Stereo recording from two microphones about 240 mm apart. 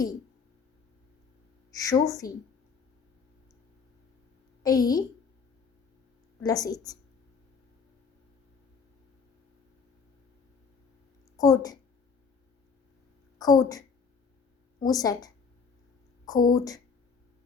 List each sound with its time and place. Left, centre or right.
1.7 s a woman's voice: centre
4.6 s a woman's voice: centre
6.4 s a woman's voice: centre
11.3 s a woman's voice: centre
13.4 s a woman's voice: centre
16.5 s a woman's voice: centre